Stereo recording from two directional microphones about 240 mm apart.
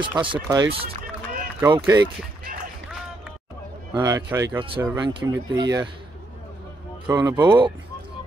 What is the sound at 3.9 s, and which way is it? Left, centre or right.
Speech, centre.